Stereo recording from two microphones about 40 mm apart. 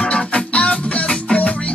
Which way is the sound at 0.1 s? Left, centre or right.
Left.